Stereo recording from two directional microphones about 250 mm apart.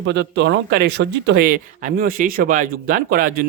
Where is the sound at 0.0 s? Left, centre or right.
Right.